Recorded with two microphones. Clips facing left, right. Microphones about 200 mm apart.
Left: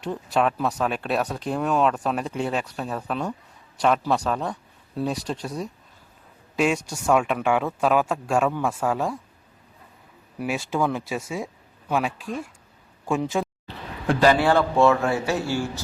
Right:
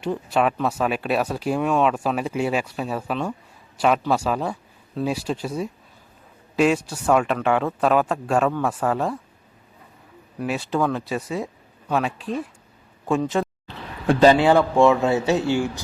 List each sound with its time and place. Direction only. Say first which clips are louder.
0.0 s speech: right 2 dB; centre (ahead or behind)
10.3 s speech: right 2 dB; 5° left (ahead or behind)
14.2 s a man's voice: right 4 dB; 20° right (ahead or behind)